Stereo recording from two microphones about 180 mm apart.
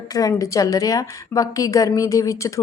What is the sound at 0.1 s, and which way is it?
A woman's voice, 20° left (ahead or behind).